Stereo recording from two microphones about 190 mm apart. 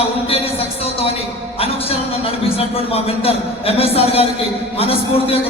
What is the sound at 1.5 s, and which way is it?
A man's voice, 30° left (ahead or behind).